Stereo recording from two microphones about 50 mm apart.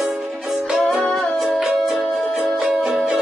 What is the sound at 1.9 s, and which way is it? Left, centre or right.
Music, right.